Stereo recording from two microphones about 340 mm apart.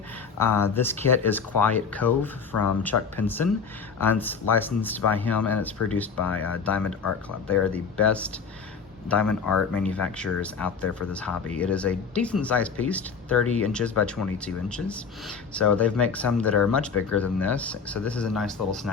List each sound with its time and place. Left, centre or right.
0.3 s speech: centre